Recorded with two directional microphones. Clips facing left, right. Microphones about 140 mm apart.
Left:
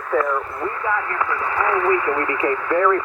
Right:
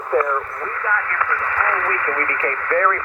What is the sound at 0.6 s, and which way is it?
Speech, 15° left (ahead or behind).